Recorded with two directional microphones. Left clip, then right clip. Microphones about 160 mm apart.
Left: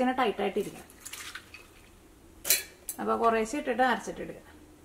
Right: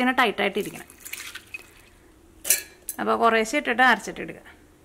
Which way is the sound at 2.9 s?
25° right (ahead or behind).